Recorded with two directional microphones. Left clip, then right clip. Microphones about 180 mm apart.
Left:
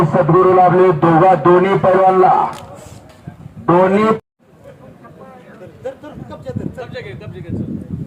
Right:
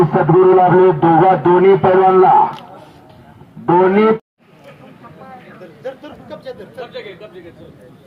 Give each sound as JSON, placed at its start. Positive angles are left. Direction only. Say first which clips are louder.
{"t": 0.1, "sound": "a man's voice", "louder": "right 1 dB", "side_deg": 75}
{"t": 3.7, "sound": "a man's voice", "louder": "right 1 dB", "side_deg": 80}
{"t": 5.8, "sound": "a sound", "louder": "left 1 dB", "side_deg": 15}
{"t": 6.8, "sound": "speech", "louder": "even", "side_deg": -15}